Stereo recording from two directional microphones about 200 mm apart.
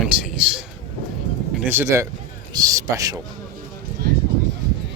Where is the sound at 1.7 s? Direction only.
10° right (ahead or behind).